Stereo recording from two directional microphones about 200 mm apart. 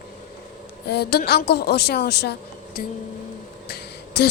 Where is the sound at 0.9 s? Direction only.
50° left (ahead or behind).